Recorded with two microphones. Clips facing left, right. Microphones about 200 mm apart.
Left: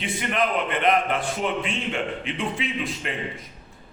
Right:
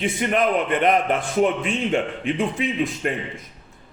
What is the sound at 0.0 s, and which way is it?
A man's voice, 45° right (ahead or behind).